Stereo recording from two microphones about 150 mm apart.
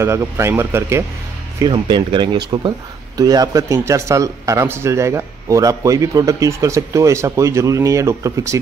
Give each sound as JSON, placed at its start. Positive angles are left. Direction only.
{"t": 0.0, "sound": "speech", "side_deg": -20}
{"t": 1.6, "sound": "speech", "side_deg": -30}